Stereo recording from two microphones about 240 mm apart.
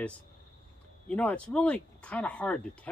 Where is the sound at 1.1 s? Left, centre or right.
Centre.